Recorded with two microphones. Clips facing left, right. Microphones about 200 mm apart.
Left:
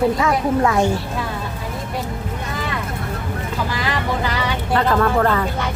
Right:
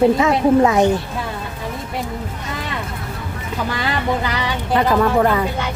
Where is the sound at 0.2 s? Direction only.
20° right (ahead or behind).